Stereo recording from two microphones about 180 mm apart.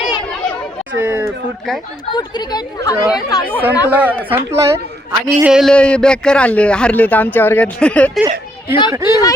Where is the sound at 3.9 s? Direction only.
10° right (ahead or behind).